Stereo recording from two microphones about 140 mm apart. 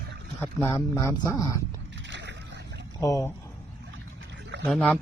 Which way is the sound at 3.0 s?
20° left (ahead or behind).